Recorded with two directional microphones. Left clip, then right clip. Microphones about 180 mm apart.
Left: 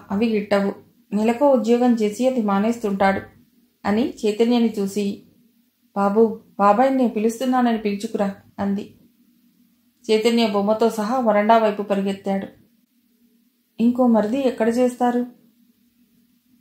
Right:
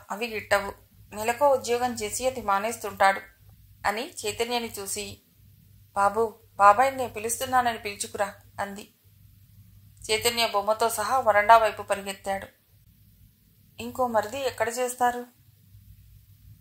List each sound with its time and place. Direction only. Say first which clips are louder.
0.1 s speech: left 5 dB; 35° right (ahead or behind)
6.5 s speech: even; 40° right (ahead or behind)
10.0 s speech: left 6 dB; 40° right (ahead or behind)
13.7 s speech: left 7 dB; 40° right (ahead or behind)